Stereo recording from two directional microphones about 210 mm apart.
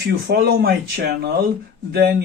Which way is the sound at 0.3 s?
50° right (ahead or behind).